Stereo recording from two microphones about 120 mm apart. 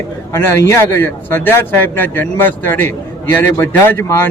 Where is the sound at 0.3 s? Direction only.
20° left (ahead or behind).